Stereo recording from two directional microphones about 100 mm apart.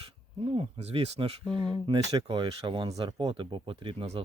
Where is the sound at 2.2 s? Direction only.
55° right (ahead or behind).